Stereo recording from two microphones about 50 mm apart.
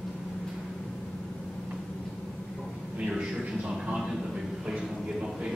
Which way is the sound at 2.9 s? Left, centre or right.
Centre.